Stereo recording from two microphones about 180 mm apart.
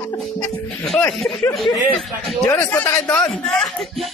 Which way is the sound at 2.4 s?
10° left (ahead or behind).